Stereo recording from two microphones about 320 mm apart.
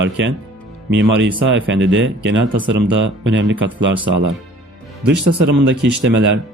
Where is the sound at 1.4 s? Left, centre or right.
Right.